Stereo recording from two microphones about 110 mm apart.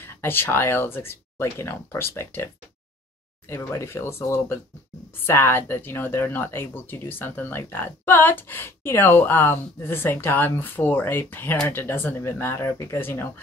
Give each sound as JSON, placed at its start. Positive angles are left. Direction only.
{"t": 0.0, "sound": "speech", "side_deg": 20}